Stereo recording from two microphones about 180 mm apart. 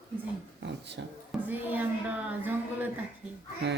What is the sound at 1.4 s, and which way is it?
A woman's voice, 10° right (ahead or behind).